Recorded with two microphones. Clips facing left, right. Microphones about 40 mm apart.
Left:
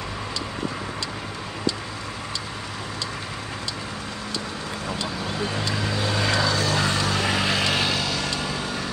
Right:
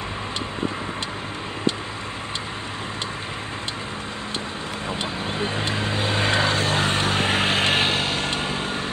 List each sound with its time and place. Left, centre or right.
4.8 s vehicle: right